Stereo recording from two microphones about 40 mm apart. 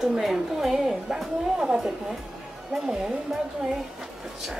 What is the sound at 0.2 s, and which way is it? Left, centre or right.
A woman's voice, centre.